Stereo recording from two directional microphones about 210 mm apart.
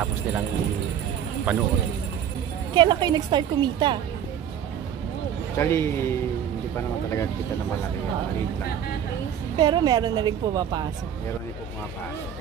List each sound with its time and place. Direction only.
1.5 s speech: 5° right (ahead or behind)
2.7 s speech: 20° right (ahead or behind)
5.6 s speech: 10° left (ahead or behind)
9.6 s speech: 20° right (ahead or behind)